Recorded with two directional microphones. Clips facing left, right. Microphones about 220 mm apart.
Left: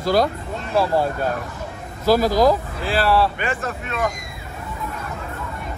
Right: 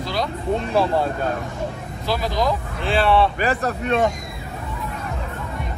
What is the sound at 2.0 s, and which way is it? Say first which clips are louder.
Speech: left 7 dB; 40° left (ahead or behind).